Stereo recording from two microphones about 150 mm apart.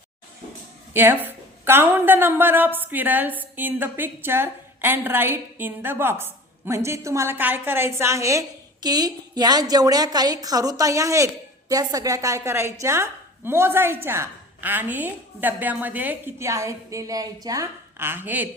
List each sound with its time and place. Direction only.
0.9 s a woman's voice: 15° right (ahead or behind)